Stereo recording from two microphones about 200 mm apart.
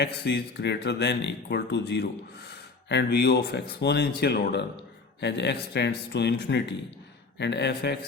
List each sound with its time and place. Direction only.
0.0 s speech: 55° left (ahead or behind)